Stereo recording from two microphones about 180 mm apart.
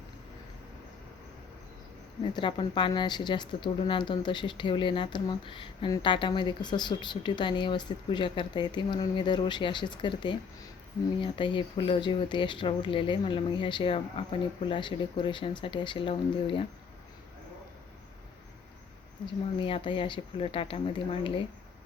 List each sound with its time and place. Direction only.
2.2 s speech: 25° left (ahead or behind)
19.2 s speech: 30° left (ahead or behind)